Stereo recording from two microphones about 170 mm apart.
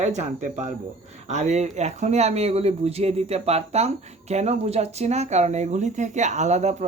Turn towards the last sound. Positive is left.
turn(degrees=-45)  # may be behind; listen again after turning